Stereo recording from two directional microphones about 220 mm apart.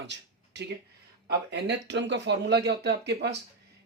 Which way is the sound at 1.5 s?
50° right (ahead or behind).